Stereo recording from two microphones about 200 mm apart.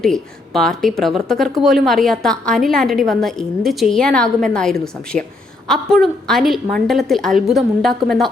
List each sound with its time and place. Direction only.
0.0 s a woman's voice: centre (ahead or behind)